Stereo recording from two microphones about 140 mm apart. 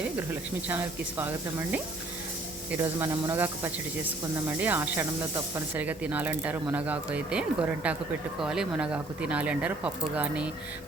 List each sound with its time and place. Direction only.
0.7 s speech: 15° right (ahead or behind)
2.7 s speech: 20° right (ahead or behind)